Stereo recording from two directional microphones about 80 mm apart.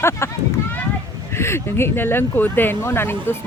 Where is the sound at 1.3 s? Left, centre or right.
Left.